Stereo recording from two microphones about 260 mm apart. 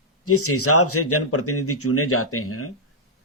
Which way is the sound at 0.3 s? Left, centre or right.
Left.